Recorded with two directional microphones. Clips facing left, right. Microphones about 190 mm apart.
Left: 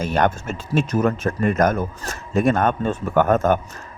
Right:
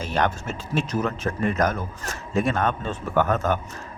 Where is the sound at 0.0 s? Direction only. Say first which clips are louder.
Left 4 dB; 50° left (ahead or behind).